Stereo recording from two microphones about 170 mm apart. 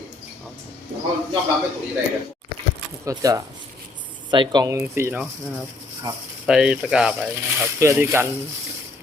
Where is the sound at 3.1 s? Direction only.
20° right (ahead or behind).